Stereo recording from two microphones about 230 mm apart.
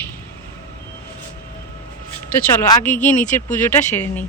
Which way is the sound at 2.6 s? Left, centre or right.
Centre.